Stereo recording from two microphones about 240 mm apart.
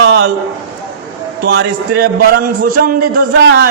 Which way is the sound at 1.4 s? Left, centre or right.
Right.